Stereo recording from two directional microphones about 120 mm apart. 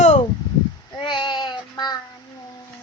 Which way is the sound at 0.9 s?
40° left (ahead or behind).